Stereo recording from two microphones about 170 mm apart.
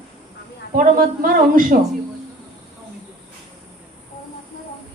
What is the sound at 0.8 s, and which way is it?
Speech, 55° right (ahead or behind).